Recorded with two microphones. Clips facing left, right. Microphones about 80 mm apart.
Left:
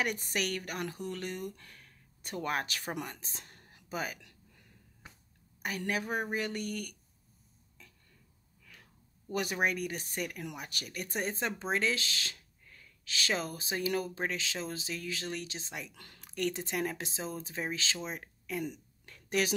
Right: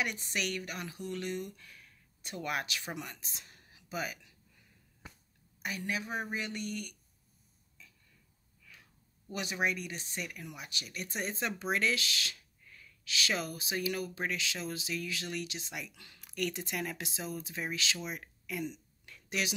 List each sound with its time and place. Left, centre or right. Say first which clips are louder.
0.0 s speech: left 2 dB; left
4.2 s a sound: left 4 dB; left
5.6 s speech: left 2 dB; left
9.3 s speech: left 2 dB; left
15.9 s a woman's voice: left 3 dB; left
16.3 s speech: left 2 dB; left
18.6 s a sound: left 1 dB; left